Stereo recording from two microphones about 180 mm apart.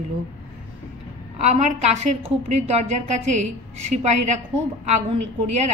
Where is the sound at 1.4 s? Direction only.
40° right (ahead or behind).